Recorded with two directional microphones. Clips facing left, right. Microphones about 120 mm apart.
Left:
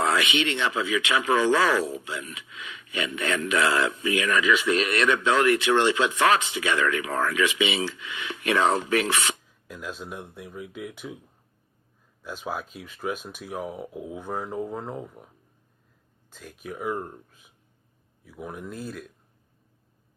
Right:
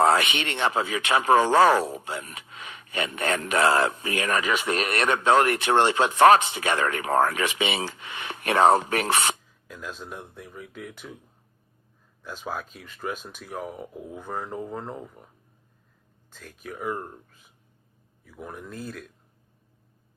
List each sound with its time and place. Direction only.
0.2 s speech: 50° right (ahead or behind)
9.6 s speech: 5° left (ahead or behind)
12.2 s speech: 5° left (ahead or behind)
16.3 s speech: 5° left (ahead or behind)
18.3 s speech: 5° left (ahead or behind)